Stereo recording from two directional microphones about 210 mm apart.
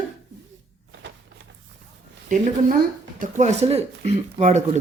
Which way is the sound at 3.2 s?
35° right (ahead or behind).